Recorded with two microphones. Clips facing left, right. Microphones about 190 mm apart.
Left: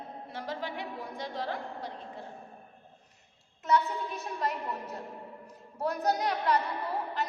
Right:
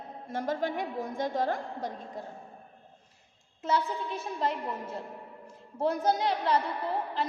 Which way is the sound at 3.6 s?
30° right (ahead or behind).